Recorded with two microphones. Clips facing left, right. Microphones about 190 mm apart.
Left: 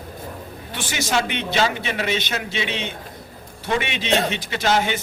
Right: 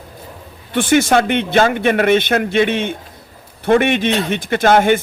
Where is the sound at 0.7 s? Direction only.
55° right (ahead or behind).